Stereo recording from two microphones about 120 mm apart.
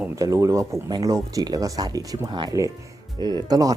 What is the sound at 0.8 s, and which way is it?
Speech, 35° right (ahead or behind).